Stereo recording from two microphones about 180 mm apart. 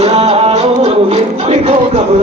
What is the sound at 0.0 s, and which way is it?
Music, 35° right (ahead or behind).